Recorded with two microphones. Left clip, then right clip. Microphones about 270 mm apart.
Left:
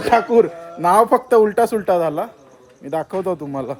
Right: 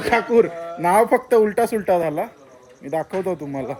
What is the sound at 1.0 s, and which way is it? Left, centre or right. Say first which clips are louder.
Speech: left 3 dB; centre.